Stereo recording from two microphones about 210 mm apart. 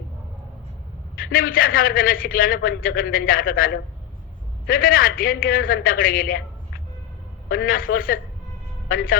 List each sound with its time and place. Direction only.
1.1 s a man's voice: 45° left (ahead or behind)
7.5 s a man's voice: 45° left (ahead or behind)